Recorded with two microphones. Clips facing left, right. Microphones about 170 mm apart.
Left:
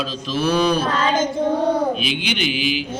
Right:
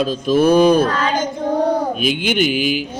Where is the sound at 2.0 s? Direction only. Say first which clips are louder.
Right 6 dB; 50° right (ahead or behind).